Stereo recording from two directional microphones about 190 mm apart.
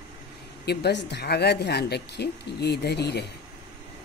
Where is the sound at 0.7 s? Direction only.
60° left (ahead or behind).